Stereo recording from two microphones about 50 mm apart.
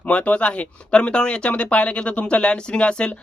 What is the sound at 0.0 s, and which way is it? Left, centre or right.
Speech, left.